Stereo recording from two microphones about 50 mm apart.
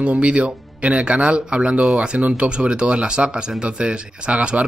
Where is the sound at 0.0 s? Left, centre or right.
Right.